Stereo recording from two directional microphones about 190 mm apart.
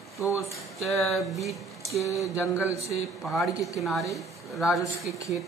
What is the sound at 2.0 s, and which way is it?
Mantra, 15° left (ahead or behind).